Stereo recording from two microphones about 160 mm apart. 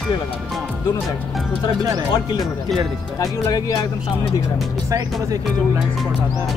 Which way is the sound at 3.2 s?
20° left (ahead or behind).